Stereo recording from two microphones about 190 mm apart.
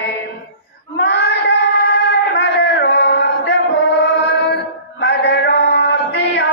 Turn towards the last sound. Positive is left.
turn(degrees=65)  # may be behind; listen again after turning